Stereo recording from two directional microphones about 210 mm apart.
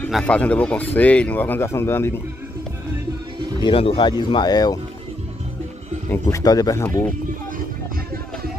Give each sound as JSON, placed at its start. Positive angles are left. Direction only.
{"t": 0.0, "sound": "speech", "side_deg": 5}
{"t": 3.6, "sound": "speech", "side_deg": 25}
{"t": 6.0, "sound": "speech", "side_deg": 10}